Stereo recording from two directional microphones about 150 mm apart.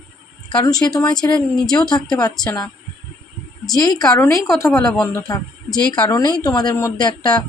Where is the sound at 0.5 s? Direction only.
25° left (ahead or behind).